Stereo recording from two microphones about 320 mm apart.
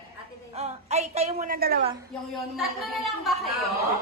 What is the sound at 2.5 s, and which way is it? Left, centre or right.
Speech, centre.